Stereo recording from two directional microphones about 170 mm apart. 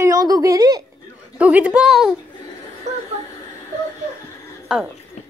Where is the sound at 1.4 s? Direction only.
10° right (ahead or behind).